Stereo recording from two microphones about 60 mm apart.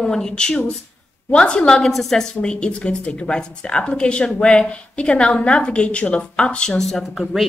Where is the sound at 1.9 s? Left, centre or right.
Centre.